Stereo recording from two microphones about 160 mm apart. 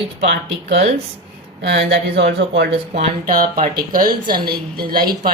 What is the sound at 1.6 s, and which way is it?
Speech, 90° right.